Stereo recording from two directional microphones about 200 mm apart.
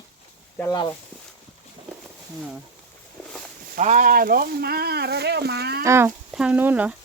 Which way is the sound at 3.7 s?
40° right (ahead or behind).